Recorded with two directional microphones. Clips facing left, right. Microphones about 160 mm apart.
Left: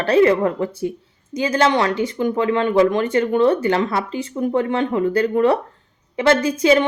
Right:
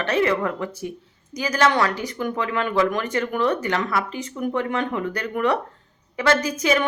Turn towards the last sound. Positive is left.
turn(degrees=30)  # may be behind; listen again after turning